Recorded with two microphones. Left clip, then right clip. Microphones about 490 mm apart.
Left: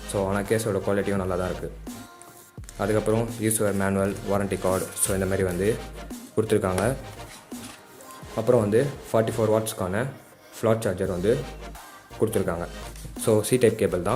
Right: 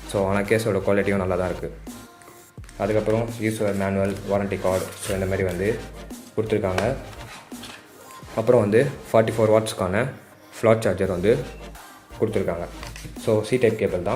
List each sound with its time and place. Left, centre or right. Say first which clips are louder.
0.1 s speech: right 4 dB; left
2.7 s speech: right 2 dB; left
8.4 s speech: right 3 dB; left